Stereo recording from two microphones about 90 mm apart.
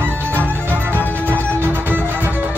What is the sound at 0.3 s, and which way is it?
Music, 25° right (ahead or behind).